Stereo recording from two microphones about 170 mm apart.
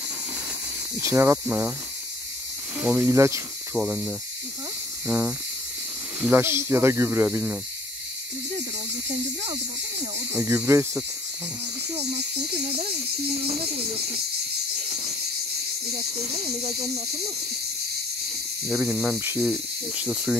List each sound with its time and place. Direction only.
1.0 s speech: 15° right (ahead or behind)
2.8 s speech: 10° right (ahead or behind)
3.7 s speech: 5° right (ahead or behind)
10.3 s speech: 15° right (ahead or behind)
13.3 s speech: 35° right (ahead or behind)
16.0 s speech: 40° right (ahead or behind)
18.7 s speech: centre (ahead or behind)
19.1 s speech: 15° right (ahead or behind)
19.4 s speech: centre (ahead or behind)